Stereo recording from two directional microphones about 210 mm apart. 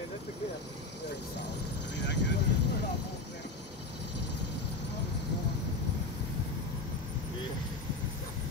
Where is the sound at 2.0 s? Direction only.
55° left (ahead or behind).